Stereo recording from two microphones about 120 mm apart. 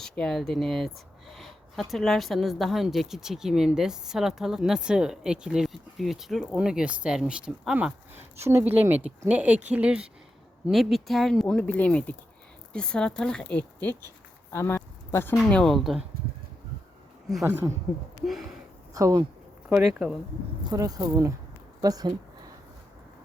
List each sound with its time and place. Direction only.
0.0 s speech: 5° left (ahead or behind)
14.5 s speech: 25° left (ahead or behind)
15.4 s speech: 5° left (ahead or behind)
17.4 s speech: 20° right (ahead or behind)
18.9 s speech: 30° right (ahead or behind)
19.6 s speech: 5° right (ahead or behind)
20.7 s speech: 30° right (ahead or behind)